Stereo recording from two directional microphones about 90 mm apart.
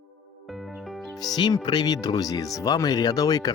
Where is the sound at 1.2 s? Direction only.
50° left (ahead or behind).